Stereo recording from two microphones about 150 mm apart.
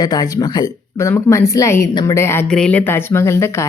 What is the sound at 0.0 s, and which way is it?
Speech, 25° left (ahead or behind).